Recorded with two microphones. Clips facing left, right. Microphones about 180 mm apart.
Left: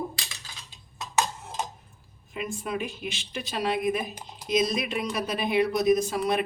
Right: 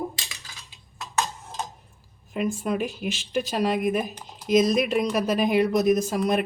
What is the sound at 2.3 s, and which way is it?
Speech, 45° right (ahead or behind).